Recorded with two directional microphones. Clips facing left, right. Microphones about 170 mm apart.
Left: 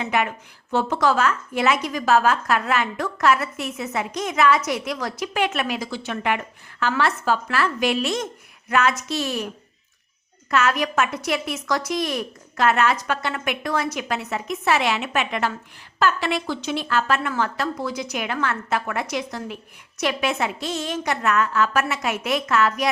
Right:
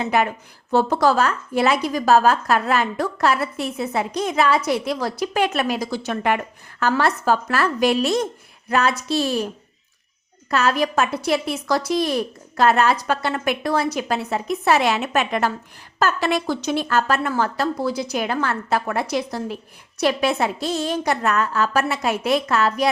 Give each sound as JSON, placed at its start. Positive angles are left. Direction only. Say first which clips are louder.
{"t": 0.0, "sound": "a woman's voice", "louder": "right 3 dB", "side_deg": -35}
{"t": 10.5, "sound": "a woman's voice", "louder": "right 2 dB", "side_deg": -35}